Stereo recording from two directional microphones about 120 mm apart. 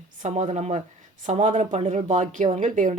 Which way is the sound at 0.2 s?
80° right.